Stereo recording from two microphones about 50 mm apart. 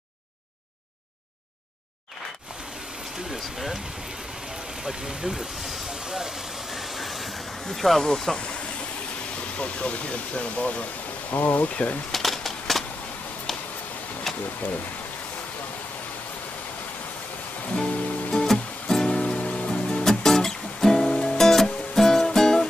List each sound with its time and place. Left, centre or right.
3.3 s speech: centre
4.8 s vehicle: centre
8.4 s speech: left
11.2 s speech: left
11.7 s speech: left
12.1 s coin: centre
14.3 s a sound: centre
17.7 s music: centre